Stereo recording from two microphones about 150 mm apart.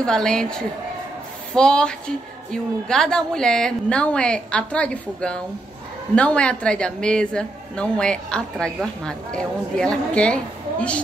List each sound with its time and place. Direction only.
0.0 s a woman's voice: 5° left (ahead or behind)